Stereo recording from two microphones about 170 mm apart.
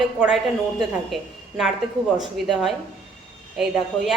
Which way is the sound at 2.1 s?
Centre (ahead or behind).